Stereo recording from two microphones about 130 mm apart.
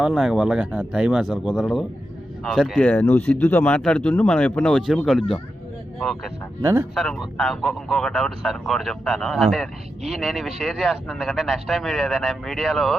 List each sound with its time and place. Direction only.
0.0 s speech: centre (ahead or behind); by 3.8 s 20° left (ahead or behind)
3.8 s speech: 5° left (ahead or behind)
6.6 s speech: 15° right (ahead or behind)
6.9 s speech: centre (ahead or behind)